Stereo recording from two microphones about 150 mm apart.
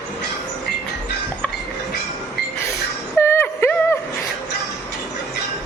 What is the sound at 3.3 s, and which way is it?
Music, 15° left (ahead or behind).